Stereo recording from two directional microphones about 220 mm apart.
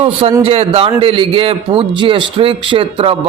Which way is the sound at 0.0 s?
25° right (ahead or behind).